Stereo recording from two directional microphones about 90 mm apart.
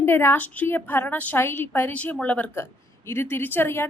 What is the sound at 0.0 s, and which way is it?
A woman's voice, 25° left (ahead or behind).